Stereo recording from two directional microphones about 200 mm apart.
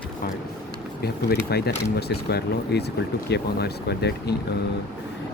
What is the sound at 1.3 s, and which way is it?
Speech, 55° left (ahead or behind).